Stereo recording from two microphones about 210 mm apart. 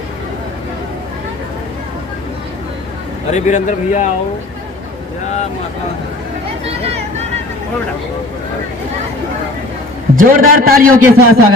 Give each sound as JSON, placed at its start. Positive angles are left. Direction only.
{"t": 3.3, "sound": "a man's voice", "side_deg": 35}
{"t": 6.7, "sound": "vehicle", "side_deg": -30}
{"t": 10.2, "sound": "a man's voice", "side_deg": -40}